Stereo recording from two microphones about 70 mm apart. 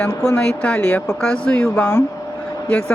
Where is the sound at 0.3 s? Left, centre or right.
Centre.